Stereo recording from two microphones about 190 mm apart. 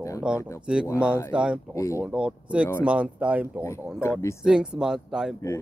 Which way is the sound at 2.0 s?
5° right (ahead or behind).